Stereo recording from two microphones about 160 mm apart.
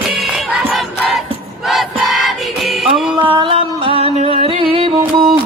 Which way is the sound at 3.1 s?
30° right (ahead or behind).